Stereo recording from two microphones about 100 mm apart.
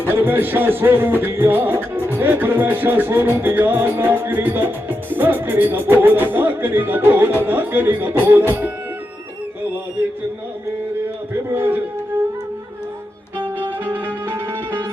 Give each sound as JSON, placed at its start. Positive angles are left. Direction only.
{"t": 0.0, "sound": "music", "side_deg": -20}
{"t": 11.5, "sound": "music", "side_deg": -20}
{"t": 13.8, "sound": "music", "side_deg": -20}